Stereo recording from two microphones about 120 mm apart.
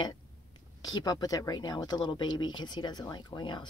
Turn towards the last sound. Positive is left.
turn(degrees=40)  # may be behind; listen again after turning